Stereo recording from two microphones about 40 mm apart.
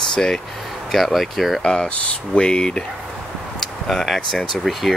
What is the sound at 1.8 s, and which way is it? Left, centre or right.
Speech, left.